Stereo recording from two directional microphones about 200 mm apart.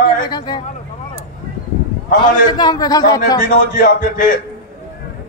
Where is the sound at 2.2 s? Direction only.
20° left (ahead or behind).